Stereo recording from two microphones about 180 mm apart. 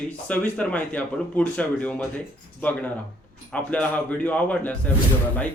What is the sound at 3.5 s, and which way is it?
A man's voice, 5° left (ahead or behind).